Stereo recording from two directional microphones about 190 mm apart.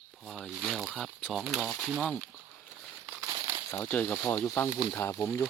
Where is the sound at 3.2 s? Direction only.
20° right (ahead or behind).